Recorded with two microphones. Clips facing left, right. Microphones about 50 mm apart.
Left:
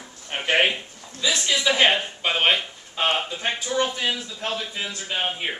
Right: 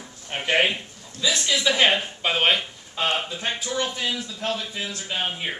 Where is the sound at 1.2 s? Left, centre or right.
Centre.